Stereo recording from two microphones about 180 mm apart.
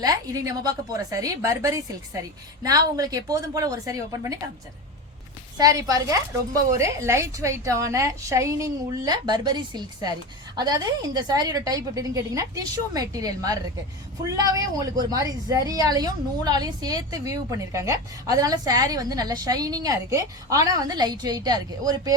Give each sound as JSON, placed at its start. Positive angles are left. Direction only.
{"t": 0.0, "sound": "a woman's voice", "side_deg": -20}
{"t": 5.5, "sound": "a woman's voice", "side_deg": -20}